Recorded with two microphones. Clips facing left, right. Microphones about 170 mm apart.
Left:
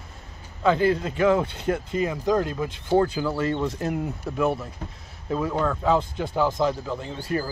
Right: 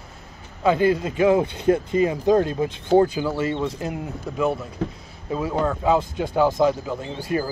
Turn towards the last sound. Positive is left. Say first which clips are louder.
# right 3 dB
turn(degrees=-15)  # may be behind; listen again after turning